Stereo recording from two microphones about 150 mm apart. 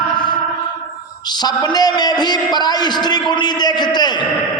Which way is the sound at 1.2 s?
30° left (ahead or behind).